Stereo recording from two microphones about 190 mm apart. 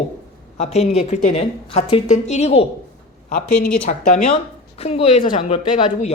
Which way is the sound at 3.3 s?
55° left (ahead or behind).